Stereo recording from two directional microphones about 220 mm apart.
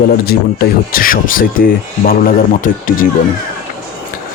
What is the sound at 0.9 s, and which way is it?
Speech, 40° left (ahead or behind).